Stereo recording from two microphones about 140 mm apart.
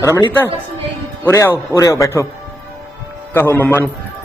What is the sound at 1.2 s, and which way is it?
A man's voice, 20° left (ahead or behind).